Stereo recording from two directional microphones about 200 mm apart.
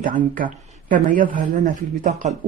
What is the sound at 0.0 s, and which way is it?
Speech, 40° right (ahead or behind).